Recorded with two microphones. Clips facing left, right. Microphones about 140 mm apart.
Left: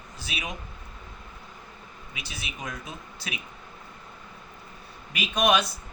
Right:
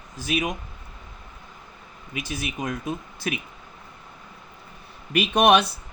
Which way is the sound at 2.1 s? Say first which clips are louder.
Right 10 dB; 45° right (ahead or behind).